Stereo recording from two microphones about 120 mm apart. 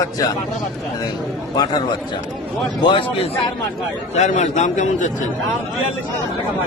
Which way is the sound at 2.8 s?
45° left (ahead or behind).